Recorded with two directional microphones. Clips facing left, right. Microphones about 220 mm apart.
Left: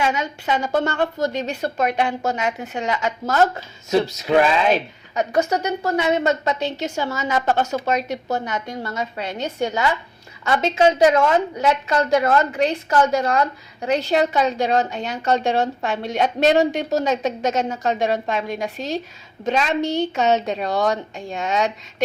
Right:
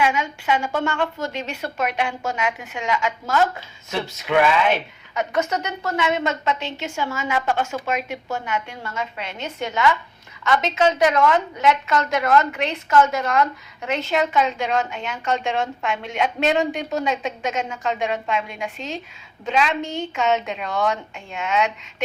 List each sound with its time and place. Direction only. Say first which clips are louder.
0.0 s a woman's voice: even; 40° left (ahead or behind)